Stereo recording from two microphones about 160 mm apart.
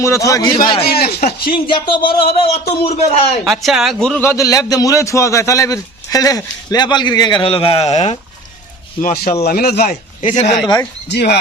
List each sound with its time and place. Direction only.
0.0 s a man's voice: 20° left (ahead or behind)
0.9 s speech: 75° left (ahead or behind)
1.5 s a man's voice: 30° left (ahead or behind)
3.4 s speech: centre (ahead or behind)
4.2 s a man's voice: 15° left (ahead or behind); by 8.2 s 45° left (ahead or behind)
9.0 s speech: 60° left (ahead or behind)
9.4 s speech: 75° left (ahead or behind)
9.9 s a man's voice: 40° left (ahead or behind)
11.1 s speech: 90° left